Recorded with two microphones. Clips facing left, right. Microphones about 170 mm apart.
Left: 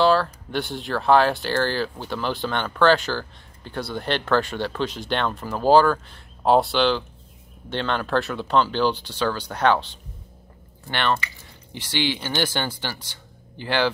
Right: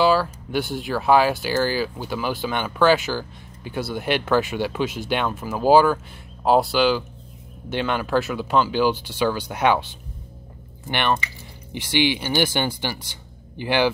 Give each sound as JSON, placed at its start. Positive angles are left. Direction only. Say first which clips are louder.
{"t": 0.0, "sound": "speech", "louder": "even", "side_deg": -5}